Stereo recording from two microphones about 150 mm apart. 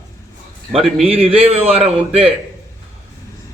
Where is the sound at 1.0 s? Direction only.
40° right (ahead or behind).